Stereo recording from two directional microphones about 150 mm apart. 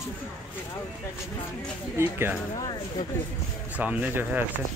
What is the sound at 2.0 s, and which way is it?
Speech, 15° right (ahead or behind).